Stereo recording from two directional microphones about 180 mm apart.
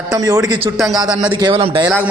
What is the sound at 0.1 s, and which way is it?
Speech, 20° right (ahead or behind).